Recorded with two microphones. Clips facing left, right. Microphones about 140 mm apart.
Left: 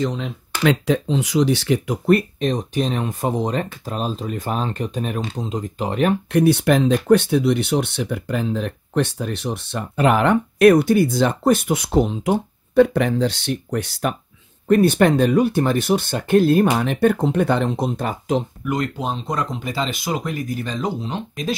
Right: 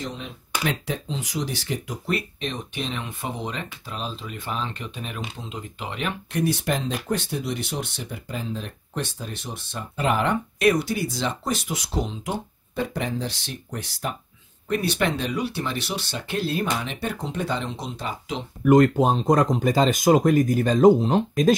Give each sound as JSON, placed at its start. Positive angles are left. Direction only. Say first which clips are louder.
{"t": 0.0, "sound": "speech", "louder": "left 10 dB", "side_deg": 90}
{"t": 0.7, "sound": "speech", "louder": "left 11 dB", "side_deg": 70}
{"t": 2.0, "sound": "speech", "louder": "left 11 dB", "side_deg": 45}
{"t": 6.3, "sound": "speech", "louder": "left 8 dB", "side_deg": 65}
{"t": 14.7, "sound": "speech", "louder": "left 10 dB", "side_deg": 50}
{"t": 18.6, "sound": "speech", "louder": "right 8 dB", "side_deg": -50}